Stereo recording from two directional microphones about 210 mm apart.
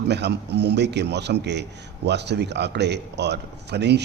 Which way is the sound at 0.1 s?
55° right (ahead or behind).